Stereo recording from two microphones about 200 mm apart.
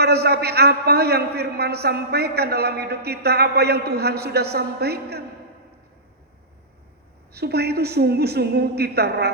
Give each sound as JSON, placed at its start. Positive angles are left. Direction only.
{"t": 0.0, "sound": "a man's voice", "side_deg": -55}
{"t": 7.3, "sound": "a man's voice", "side_deg": -55}